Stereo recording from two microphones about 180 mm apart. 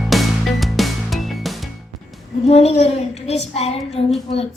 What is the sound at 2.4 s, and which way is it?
A child's voice, 35° left (ahead or behind).